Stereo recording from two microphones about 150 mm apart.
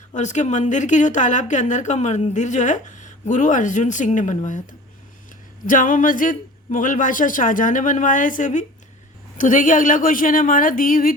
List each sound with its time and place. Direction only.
0.1 s a woman's voice: 55° left (ahead or behind); by 11.1 s 70° left (ahead or behind)